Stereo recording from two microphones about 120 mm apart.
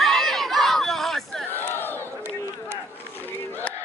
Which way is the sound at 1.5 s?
15° left (ahead or behind).